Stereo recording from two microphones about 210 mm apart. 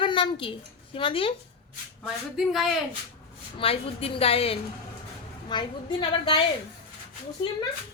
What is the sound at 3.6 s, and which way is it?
A woman's voice, 25° left (ahead or behind).